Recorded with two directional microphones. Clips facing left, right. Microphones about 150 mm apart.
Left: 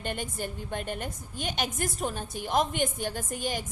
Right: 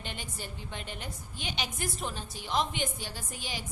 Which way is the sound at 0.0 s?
50° left (ahead or behind).